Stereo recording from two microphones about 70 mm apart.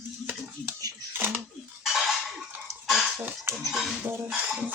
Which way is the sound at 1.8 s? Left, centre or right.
Centre.